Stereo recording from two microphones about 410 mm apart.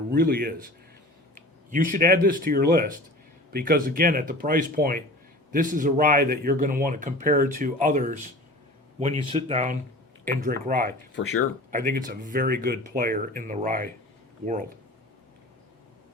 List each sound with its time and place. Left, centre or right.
0.1 s speech: right